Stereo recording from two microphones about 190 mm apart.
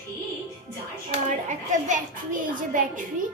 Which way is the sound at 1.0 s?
40° right (ahead or behind).